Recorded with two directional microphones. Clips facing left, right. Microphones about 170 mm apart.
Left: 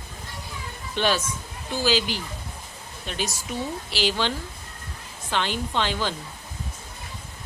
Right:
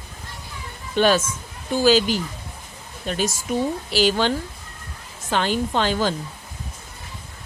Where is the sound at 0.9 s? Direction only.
45° right (ahead or behind).